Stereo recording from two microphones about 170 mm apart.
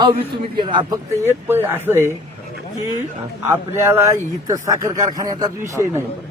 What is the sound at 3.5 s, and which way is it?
A man's voice, 15° right (ahead or behind).